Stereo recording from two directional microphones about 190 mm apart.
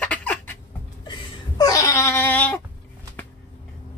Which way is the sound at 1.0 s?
20° left (ahead or behind).